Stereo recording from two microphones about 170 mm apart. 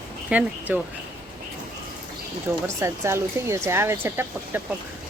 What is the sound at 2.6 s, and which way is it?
A woman's voice, 15° right (ahead or behind).